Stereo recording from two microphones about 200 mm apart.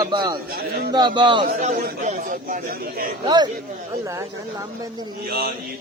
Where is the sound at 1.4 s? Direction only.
45° right (ahead or behind).